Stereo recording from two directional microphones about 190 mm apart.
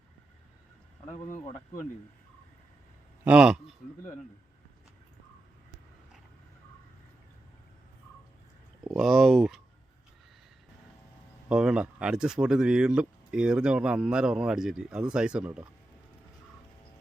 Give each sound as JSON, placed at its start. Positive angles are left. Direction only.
{"t": 1.0, "sound": "speech", "side_deg": 15}
{"t": 3.2, "sound": "speech", "side_deg": -5}
{"t": 8.8, "sound": "speech", "side_deg": 0}
{"t": 11.4, "sound": "speech", "side_deg": -5}